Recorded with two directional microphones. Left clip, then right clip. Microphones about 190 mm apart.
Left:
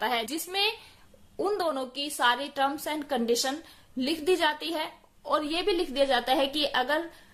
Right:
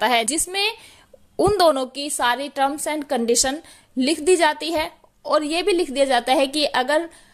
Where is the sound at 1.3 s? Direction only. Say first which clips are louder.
Right 12 dB; 45° right (ahead or behind).